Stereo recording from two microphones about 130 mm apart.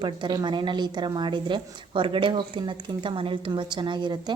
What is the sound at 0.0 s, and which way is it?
A woman's voice, 35° right (ahead or behind).